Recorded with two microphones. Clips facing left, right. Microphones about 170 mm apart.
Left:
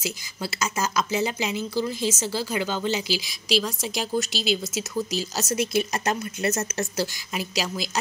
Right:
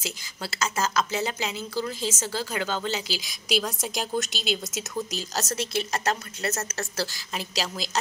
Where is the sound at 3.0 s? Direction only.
45° right (ahead or behind).